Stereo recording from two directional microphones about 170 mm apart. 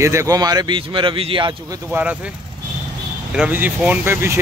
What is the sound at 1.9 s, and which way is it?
Speech, 10° right (ahead or behind).